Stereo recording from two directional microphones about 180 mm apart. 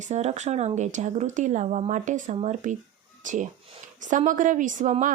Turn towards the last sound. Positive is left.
turn(degrees=-45)  # may be behind; listen again after turning